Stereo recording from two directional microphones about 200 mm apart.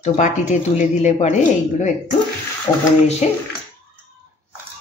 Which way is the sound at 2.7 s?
25° left (ahead or behind).